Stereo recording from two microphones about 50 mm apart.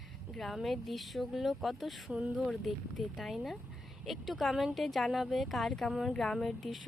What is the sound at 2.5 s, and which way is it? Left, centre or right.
Speech, centre.